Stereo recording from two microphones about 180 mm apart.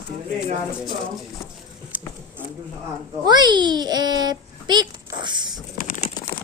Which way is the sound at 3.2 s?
25° right (ahead or behind).